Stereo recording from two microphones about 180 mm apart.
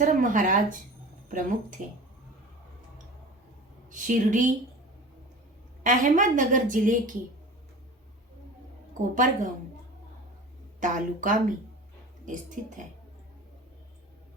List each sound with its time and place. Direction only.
0.0 s a woman's voice: 45° right (ahead or behind)
3.8 s a woman's voice: 45° right (ahead or behind)
5.8 s a woman's voice: 45° right (ahead or behind)
9.1 s a woman's voice: 45° right (ahead or behind)
10.8 s a woman's voice: 45° right (ahead or behind)